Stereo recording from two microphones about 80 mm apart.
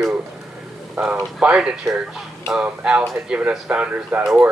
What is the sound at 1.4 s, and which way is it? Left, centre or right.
Speech, centre.